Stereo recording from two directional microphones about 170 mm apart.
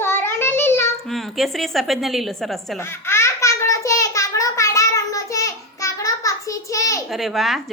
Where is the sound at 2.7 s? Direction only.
15° left (ahead or behind).